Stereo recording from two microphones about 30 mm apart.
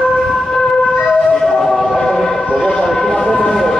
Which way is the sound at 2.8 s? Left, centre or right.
Centre.